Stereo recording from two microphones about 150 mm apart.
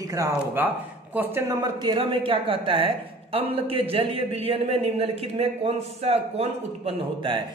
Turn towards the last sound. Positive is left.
turn(degrees=-35)  # may be behind; listen again after turning